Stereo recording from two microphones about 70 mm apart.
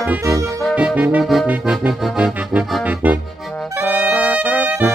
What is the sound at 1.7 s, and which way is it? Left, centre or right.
Accordion, centre.